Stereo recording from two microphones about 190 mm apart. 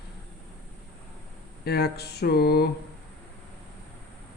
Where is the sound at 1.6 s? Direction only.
55° left (ahead or behind).